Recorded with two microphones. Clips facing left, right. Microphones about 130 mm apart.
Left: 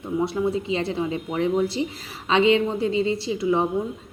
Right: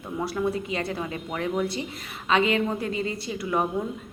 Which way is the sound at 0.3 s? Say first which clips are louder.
Left 3 dB; 25° left (ahead or behind).